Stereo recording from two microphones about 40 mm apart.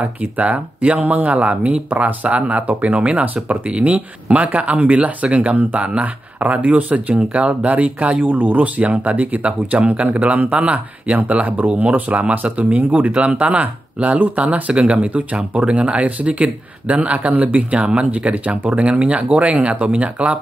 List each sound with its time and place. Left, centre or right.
0.0 s speech: right
8.3 s speech: right
8.7 s speech: right